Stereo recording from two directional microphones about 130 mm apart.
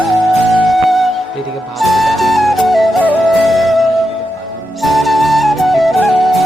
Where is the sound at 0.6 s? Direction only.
Centre (ahead or behind).